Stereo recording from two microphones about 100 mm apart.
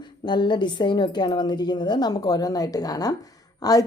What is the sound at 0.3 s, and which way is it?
A woman's voice, 50° left (ahead or behind).